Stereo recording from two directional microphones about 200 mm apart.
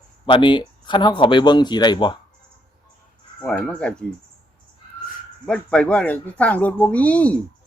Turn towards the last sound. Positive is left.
turn(degrees=5)  # may be behind; listen again after turning